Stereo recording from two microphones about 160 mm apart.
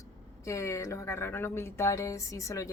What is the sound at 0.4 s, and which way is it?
A woman's voice, 20° left (ahead or behind).